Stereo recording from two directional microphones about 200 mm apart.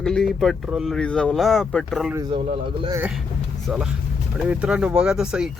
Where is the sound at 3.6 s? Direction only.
5° right (ahead or behind).